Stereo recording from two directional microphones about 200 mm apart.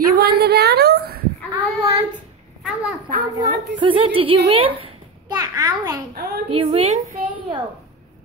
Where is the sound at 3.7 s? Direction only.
25° right (ahead or behind).